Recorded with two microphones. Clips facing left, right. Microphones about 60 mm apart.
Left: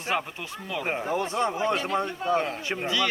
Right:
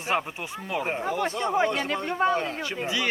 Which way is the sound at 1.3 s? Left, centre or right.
Left.